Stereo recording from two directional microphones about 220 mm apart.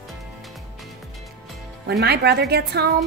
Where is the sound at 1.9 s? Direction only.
50° right (ahead or behind).